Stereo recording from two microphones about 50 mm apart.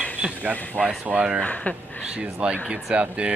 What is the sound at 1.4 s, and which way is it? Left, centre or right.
Speech, left.